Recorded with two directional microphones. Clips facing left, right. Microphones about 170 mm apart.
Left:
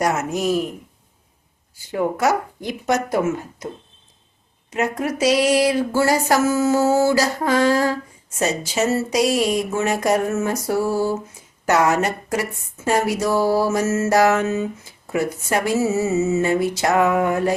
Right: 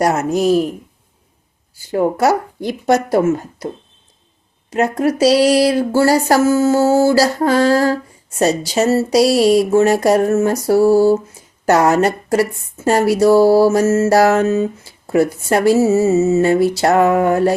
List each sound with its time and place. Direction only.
0.0 s a woman's voice: 35° right (ahead or behind)
1.9 s a woman's voice: 35° right (ahead or behind)
4.7 s a woman's voice: 35° right (ahead or behind)